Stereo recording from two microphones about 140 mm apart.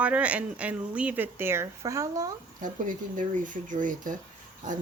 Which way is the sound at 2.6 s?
65° right (ahead or behind).